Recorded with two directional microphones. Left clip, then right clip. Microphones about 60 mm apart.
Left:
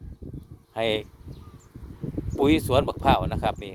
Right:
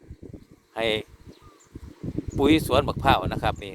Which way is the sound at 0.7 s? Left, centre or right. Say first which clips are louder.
Even; left.